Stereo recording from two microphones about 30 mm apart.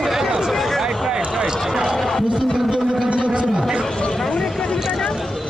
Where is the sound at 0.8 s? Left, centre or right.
Centre.